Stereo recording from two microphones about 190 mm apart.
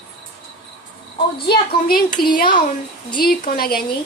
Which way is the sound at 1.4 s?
55° left (ahead or behind).